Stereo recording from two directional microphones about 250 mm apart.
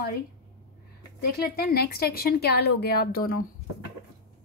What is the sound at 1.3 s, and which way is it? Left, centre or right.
Speech, left.